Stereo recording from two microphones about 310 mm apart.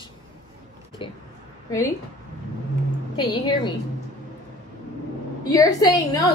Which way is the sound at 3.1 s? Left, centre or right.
Centre.